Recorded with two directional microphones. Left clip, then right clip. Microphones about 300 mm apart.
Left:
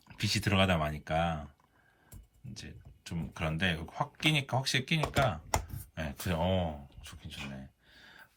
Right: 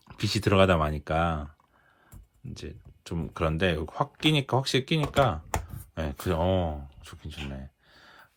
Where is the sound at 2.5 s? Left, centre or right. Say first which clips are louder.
Right 6 dB; centre.